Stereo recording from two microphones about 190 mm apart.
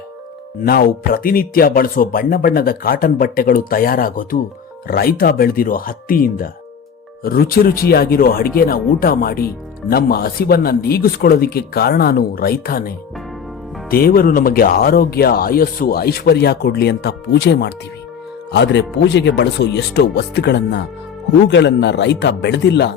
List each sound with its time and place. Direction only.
0.6 s speech: 55° left (ahead or behind)
13.9 s speech: 50° left (ahead or behind)